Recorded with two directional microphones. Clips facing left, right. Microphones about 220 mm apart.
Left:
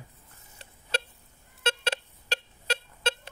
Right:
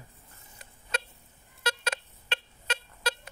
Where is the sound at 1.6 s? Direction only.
30° left (ahead or behind).